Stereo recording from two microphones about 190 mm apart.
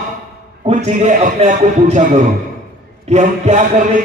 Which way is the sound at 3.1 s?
40° right (ahead or behind).